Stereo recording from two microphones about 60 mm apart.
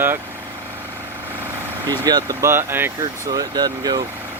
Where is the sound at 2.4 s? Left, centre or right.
Right.